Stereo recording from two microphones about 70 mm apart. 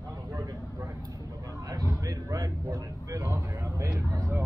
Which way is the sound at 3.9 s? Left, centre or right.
Right.